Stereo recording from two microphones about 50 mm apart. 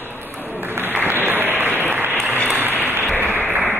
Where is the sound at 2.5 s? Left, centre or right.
Right.